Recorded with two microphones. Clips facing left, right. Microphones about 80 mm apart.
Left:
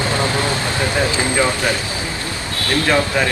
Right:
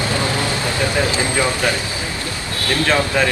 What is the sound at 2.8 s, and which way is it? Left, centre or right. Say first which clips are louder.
Speech: even; left.